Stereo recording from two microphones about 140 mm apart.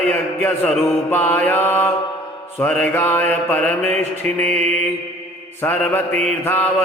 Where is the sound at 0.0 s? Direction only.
10° left (ahead or behind).